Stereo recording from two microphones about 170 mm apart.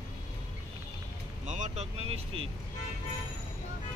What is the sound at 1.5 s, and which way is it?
Vehicle, 40° right (ahead or behind).